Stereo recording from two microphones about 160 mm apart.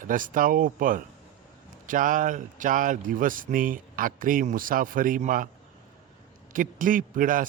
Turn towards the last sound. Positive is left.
turn(degrees=-55)  # may be behind; listen again after turning